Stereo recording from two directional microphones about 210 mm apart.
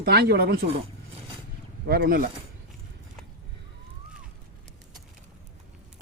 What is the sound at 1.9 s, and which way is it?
Speech, 45° right (ahead or behind).